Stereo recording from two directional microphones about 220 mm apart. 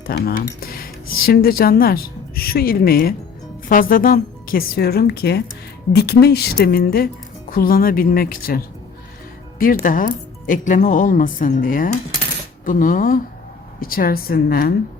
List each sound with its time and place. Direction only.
0.1 s speech: 45° left (ahead or behind)
9.8 s speech: 40° left (ahead or behind)